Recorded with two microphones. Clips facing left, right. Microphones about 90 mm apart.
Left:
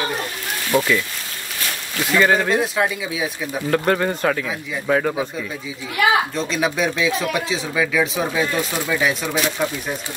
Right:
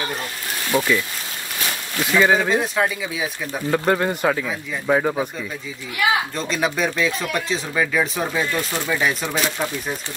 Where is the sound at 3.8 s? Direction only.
10° right (ahead or behind).